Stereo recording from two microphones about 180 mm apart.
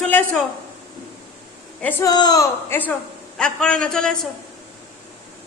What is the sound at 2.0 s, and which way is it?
A man's voice, 20° left (ahead or behind).